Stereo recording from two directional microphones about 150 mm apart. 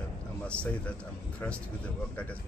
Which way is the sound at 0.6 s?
10° left (ahead or behind).